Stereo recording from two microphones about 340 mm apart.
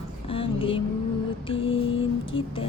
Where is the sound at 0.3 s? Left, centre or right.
Centre.